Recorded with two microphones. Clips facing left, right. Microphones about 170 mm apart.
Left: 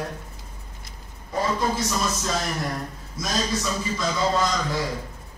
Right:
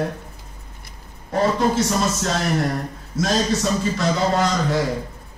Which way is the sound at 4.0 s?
75° right (ahead or behind).